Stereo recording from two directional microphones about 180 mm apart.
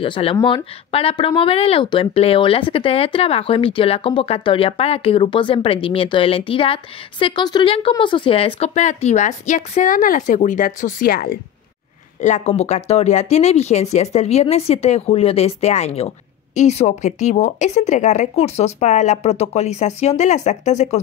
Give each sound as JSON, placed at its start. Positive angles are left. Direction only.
{"t": 0.0, "sound": "speech", "side_deg": 30}
{"t": 12.2, "sound": "speech", "side_deg": 40}